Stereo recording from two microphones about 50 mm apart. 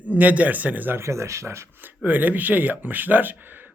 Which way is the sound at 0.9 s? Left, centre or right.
Right.